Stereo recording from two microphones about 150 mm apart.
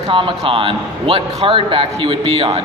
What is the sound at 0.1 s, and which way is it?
A man's voice, 35° right (ahead or behind).